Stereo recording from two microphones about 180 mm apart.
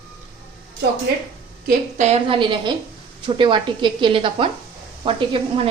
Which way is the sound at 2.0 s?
35° right (ahead or behind).